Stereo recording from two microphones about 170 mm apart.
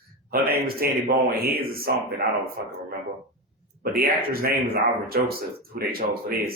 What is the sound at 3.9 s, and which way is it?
Speech, 60° right (ahead or behind).